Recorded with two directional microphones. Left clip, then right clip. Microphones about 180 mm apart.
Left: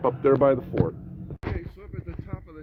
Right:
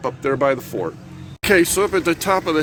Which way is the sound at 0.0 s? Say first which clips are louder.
Right 1 dB; 20° right (ahead or behind).